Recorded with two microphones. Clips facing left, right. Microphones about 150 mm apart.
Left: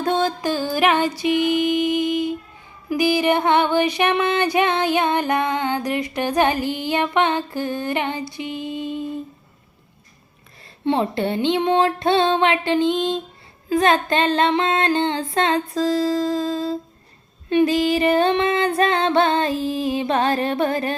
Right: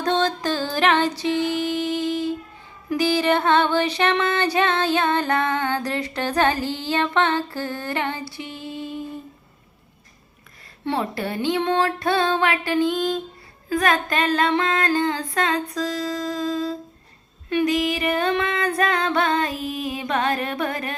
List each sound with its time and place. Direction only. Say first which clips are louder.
0.0 s music: left 1 dB; 10° left (ahead or behind)
10.8 s music: left 5 dB; 25° left (ahead or behind)